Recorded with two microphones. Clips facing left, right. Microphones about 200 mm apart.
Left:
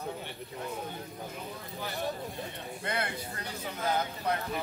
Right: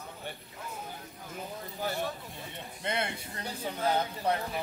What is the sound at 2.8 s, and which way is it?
Speech, 25° right (ahead or behind).